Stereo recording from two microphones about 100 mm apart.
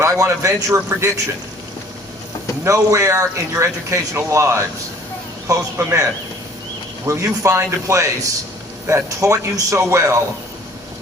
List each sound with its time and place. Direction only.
0.0 s a man's voice: 30° right (ahead or behind)
2.6 s a man's voice: 30° right (ahead or behind)